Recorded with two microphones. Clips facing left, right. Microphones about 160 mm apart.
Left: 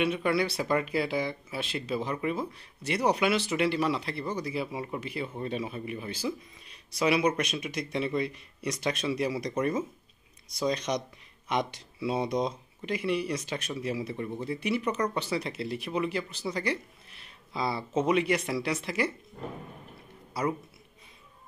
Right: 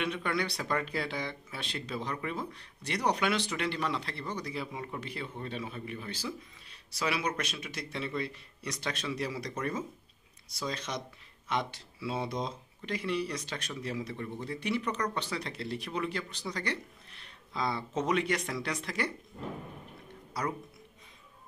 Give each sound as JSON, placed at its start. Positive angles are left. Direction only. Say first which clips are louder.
{"t": 0.0, "sound": "speech", "louder": "left 6 dB", "side_deg": 10}